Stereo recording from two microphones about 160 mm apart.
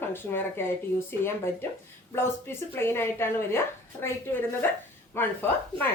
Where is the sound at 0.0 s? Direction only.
15° left (ahead or behind).